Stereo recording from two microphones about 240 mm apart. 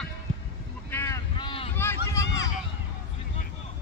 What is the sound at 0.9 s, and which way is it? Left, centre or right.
Boat, centre.